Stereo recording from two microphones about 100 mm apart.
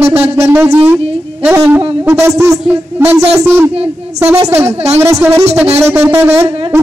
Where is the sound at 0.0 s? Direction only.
90° right.